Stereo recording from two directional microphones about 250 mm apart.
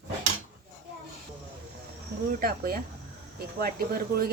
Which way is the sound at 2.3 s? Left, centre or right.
Right.